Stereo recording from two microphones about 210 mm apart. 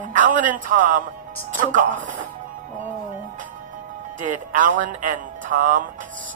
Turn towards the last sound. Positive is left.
turn(degrees=-40)  # may be behind; listen again after turning